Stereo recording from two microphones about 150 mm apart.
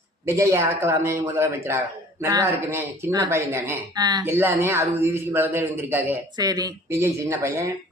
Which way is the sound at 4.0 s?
30° right (ahead or behind).